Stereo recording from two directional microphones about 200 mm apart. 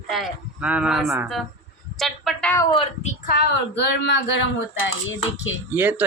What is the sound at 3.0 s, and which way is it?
Speech, 50° left (ahead or behind).